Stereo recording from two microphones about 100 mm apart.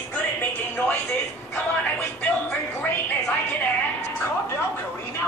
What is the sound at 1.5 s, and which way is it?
Television, 15° left (ahead or behind).